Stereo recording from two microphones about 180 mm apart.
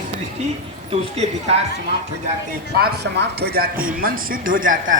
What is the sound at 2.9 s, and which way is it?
Speech, 65° right (ahead or behind).